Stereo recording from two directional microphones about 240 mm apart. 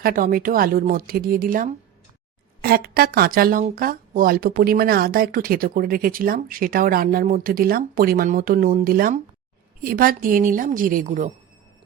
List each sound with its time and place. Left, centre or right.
0.0 s speech: right